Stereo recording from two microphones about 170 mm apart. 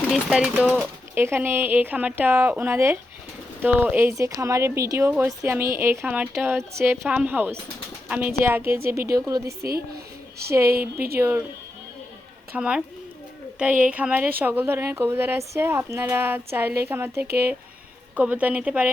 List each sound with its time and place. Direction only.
0.1 s speech: 5° right (ahead or behind)
9.6 s a woman's voice: 65° right (ahead or behind)
11.2 s speech: 10° right (ahead or behind)
12.5 s speech: 5° right (ahead or behind)